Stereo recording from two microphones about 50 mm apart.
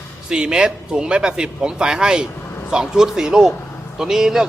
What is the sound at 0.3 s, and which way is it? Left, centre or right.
A man's voice, centre.